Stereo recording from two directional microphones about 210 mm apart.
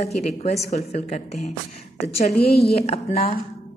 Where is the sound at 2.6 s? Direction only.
30° left (ahead or behind).